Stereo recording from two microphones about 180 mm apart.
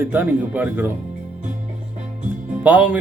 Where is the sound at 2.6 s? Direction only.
10° right (ahead or behind).